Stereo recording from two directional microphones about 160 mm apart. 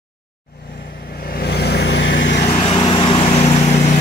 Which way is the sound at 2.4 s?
35° left (ahead or behind).